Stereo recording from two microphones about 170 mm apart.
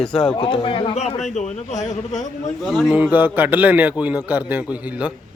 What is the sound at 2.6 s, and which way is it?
A man's voice, centre (ahead or behind).